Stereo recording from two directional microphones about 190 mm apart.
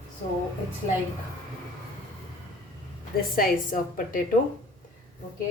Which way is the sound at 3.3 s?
45° left (ahead or behind).